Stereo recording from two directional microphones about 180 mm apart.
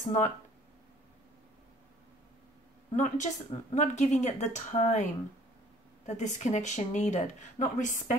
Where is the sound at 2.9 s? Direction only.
45° left (ahead or behind).